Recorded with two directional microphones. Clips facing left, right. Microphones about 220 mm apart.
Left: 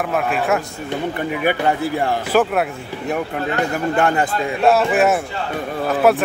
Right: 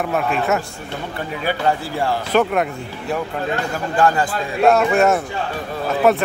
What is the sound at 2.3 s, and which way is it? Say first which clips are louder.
Speech: left 1 dB; 5° left (ahead or behind).